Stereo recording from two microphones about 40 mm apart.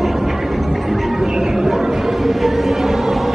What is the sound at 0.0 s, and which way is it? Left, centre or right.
Chatter, centre.